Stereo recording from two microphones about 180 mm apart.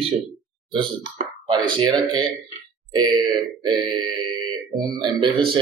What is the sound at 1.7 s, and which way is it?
Speech, 25° right (ahead or behind).